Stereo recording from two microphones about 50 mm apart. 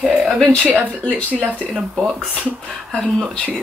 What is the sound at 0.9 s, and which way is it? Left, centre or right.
Speech, left.